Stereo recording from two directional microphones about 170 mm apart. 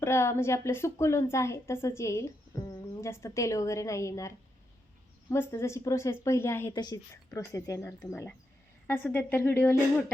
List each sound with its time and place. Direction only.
0.0 s a woman's voice: 15° left (ahead or behind)
5.3 s a woman's voice: 15° left (ahead or behind)